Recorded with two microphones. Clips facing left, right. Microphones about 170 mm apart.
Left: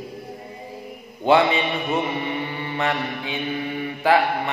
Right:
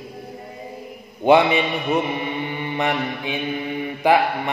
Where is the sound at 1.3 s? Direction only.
20° right (ahead or behind).